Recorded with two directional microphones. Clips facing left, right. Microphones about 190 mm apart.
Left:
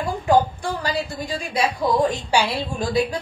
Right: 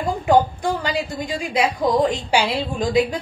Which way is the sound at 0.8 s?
15° right (ahead or behind).